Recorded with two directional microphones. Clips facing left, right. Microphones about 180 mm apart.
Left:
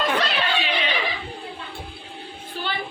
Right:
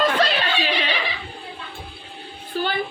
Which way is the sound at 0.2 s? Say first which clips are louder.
Right 3 dB; 40° right (ahead or behind).